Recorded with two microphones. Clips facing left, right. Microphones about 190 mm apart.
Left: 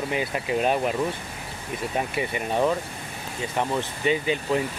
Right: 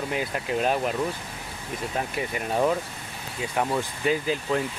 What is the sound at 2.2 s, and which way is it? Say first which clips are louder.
Speech: even; centre (ahead or behind).